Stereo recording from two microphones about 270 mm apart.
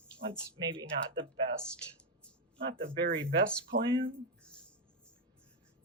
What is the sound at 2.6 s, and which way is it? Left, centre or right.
Speech, right.